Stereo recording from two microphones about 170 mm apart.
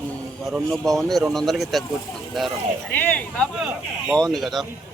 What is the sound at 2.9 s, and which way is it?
Speech, 10° left (ahead or behind).